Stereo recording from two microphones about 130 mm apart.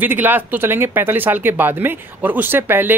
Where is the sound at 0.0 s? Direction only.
15° right (ahead or behind).